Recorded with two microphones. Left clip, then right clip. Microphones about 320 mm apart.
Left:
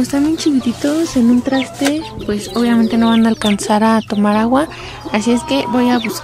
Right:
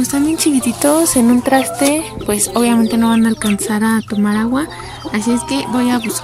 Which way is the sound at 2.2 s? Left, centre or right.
Centre.